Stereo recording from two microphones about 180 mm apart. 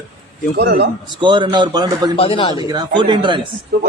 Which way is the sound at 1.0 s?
25° right (ahead or behind).